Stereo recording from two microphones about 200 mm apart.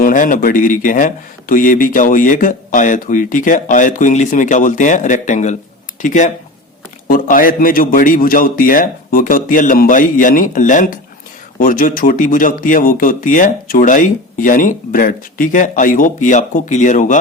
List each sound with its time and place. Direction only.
0.0 s a man's voice: 40° left (ahead or behind)